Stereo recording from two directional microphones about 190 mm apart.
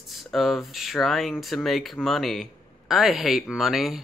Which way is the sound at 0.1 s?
Centre (ahead or behind).